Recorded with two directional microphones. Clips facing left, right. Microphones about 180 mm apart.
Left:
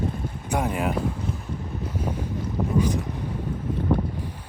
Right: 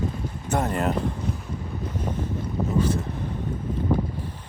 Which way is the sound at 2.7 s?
15° left (ahead or behind).